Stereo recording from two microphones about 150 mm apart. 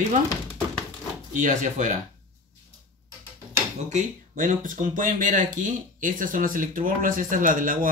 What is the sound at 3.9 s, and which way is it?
Speech, 60° right (ahead or behind).